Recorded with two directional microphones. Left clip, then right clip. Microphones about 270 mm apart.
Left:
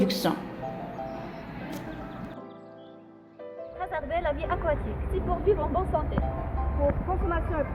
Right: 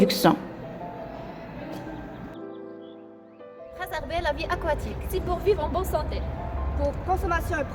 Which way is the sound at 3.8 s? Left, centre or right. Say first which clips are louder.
Right 1 dB; right.